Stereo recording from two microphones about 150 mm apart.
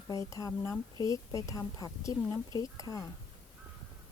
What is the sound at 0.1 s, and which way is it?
Speech, 25° left (ahead or behind).